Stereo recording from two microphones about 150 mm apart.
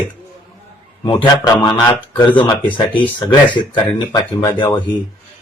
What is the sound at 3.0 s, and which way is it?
Speech, 30° left (ahead or behind).